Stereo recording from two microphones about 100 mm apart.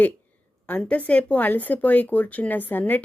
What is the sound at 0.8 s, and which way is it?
Speech, 15° left (ahead or behind).